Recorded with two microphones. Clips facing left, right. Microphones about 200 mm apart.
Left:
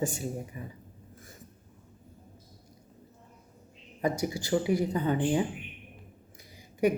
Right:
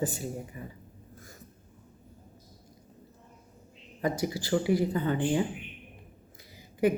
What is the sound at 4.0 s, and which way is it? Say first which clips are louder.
Speech: even; 20° left (ahead or behind).